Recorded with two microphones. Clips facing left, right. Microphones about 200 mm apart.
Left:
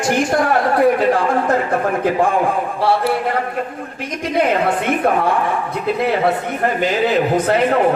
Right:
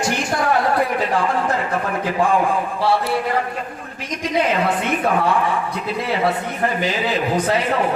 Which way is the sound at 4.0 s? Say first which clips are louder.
Left 2 dB; 55° left (ahead or behind).